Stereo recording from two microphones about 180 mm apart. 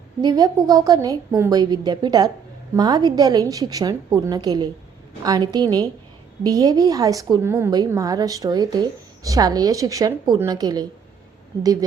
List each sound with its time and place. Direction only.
0.2 s a woman's voice: 20° right (ahead or behind)